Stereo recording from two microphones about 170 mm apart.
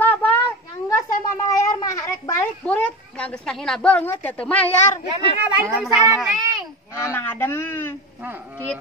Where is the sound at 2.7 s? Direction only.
5° left (ahead or behind).